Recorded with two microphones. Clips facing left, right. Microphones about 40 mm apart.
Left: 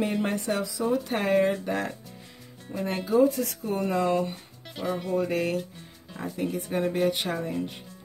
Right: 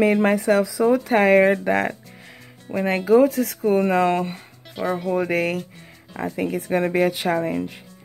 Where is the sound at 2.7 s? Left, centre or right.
Right.